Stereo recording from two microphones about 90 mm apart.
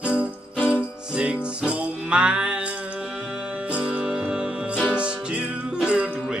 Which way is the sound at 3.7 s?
10° right (ahead or behind).